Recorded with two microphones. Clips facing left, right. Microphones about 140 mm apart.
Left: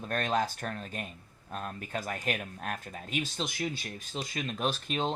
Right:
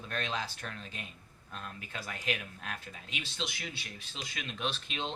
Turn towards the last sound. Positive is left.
turn(degrees=45)  # may be behind; listen again after turning